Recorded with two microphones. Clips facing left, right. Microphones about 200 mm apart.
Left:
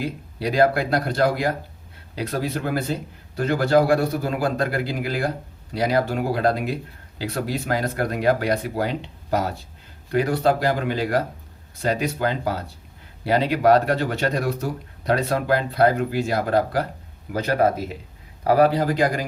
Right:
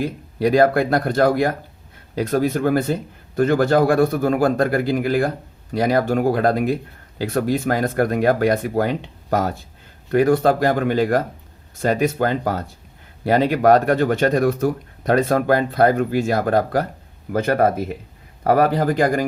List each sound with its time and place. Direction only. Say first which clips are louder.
0.0 s speech: right 6 dB; 50° right (ahead or behind)